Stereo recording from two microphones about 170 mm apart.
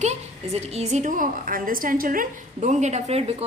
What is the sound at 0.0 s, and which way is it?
A woman's voice, 40° right (ahead or behind).